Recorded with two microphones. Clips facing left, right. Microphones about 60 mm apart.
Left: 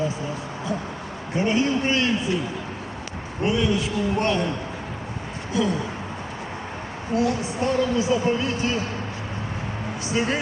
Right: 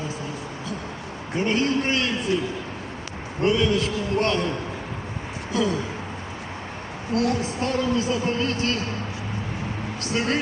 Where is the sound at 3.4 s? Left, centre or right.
Centre.